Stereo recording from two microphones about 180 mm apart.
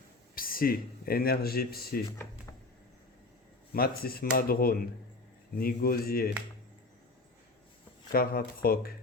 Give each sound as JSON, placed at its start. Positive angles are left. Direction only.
{"t": 0.3, "sound": "speech", "side_deg": 55}
{"t": 2.0, "sound": "speech", "side_deg": 15}
{"t": 3.7, "sound": "speech", "side_deg": 55}
{"t": 8.1, "sound": "speech", "side_deg": 55}